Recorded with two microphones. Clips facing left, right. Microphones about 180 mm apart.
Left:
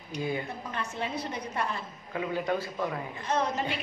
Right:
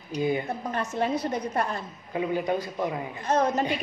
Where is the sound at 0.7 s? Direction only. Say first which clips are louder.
Right 10 dB; 45° right (ahead or behind).